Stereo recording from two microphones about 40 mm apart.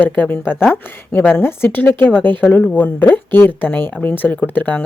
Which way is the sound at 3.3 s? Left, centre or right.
Left.